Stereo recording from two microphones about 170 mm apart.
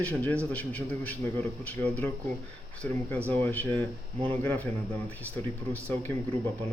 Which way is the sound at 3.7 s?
30° right (ahead or behind).